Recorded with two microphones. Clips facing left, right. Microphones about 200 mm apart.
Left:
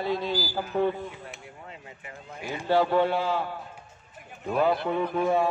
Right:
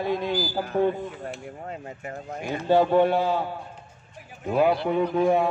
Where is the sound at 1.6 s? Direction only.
45° right (ahead or behind).